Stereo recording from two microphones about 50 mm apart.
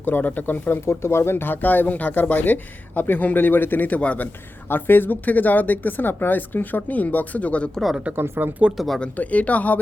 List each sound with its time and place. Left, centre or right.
0.0 s speech: left
0.9 s speech: left
4.7 s speech: left
8.1 s speech: right
9.1 s speech: left